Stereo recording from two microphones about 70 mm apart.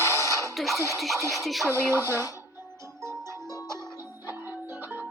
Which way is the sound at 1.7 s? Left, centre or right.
Right.